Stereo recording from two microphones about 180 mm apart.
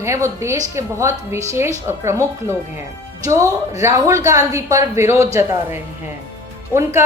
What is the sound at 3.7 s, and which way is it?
Speech, 15° right (ahead or behind).